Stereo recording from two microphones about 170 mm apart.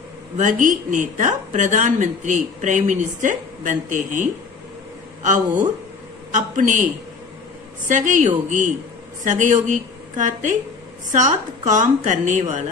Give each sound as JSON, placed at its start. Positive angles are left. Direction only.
{"t": 0.4, "sound": "a woman's voice", "side_deg": -50}
{"t": 6.3, "sound": "a woman's voice", "side_deg": -50}
{"t": 7.9, "sound": "a woman's voice", "side_deg": -45}